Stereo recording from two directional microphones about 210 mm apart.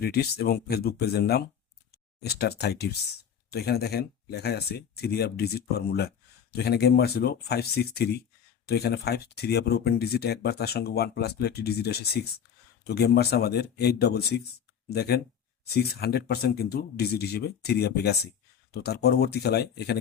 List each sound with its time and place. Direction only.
0.0 s speech: 50° left (ahead or behind)